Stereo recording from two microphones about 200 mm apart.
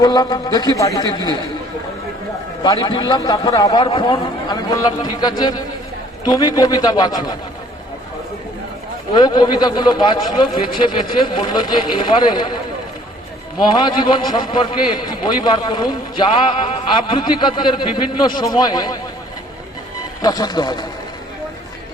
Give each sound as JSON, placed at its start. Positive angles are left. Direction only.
{"t": 0.0, "sound": "a man's voice", "side_deg": 20}
{"t": 2.6, "sound": "a man's voice", "side_deg": 20}
{"t": 9.1, "sound": "a man's voice", "side_deg": 20}
{"t": 13.7, "sound": "a man's voice", "side_deg": 25}
{"t": 20.2, "sound": "a man's voice", "side_deg": 20}